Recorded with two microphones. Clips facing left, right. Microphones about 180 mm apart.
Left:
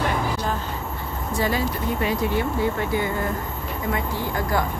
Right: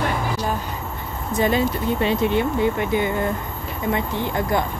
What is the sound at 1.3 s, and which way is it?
Speech, 20° right (ahead or behind).